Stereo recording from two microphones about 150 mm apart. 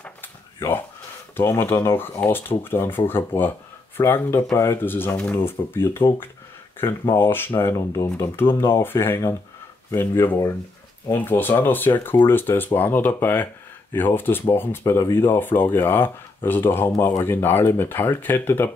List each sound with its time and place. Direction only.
0.0 s drawer open or close: 15° left (ahead or behind)
1.3 s speech: 15° left (ahead or behind)